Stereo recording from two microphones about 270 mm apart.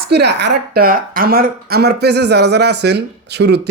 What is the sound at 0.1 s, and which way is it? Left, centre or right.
A man's voice, right.